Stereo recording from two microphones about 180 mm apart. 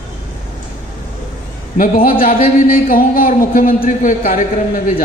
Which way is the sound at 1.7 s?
50° left (ahead or behind).